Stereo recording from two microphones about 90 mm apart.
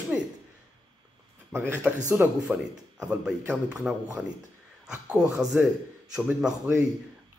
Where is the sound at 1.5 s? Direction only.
25° right (ahead or behind).